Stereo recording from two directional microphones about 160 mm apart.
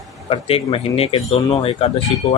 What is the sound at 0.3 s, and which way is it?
Speech, 35° left (ahead or behind).